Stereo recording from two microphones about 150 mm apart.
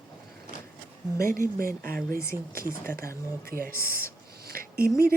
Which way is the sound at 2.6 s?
15° left (ahead or behind).